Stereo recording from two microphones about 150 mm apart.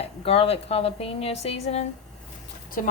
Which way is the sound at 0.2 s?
40° left (ahead or behind).